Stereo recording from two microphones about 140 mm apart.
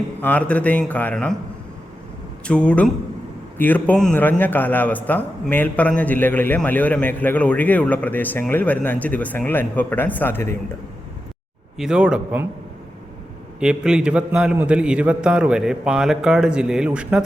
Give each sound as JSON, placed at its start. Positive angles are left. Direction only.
{"t": 0.2, "sound": "a man's voice", "side_deg": 10}
{"t": 2.5, "sound": "a man's voice", "side_deg": 10}
{"t": 11.8, "sound": "speech", "side_deg": -5}
{"t": 13.6, "sound": "a man's voice", "side_deg": -5}